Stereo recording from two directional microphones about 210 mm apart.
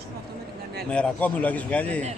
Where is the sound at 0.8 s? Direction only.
5° left (ahead or behind).